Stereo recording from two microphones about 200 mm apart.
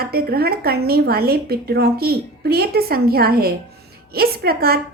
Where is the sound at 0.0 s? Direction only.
50° right (ahead or behind).